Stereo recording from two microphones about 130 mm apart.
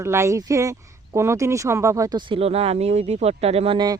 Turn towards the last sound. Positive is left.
turn(degrees=-30)  # may be behind; listen again after turning